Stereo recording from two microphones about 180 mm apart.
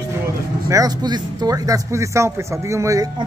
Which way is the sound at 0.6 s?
20° right (ahead or behind).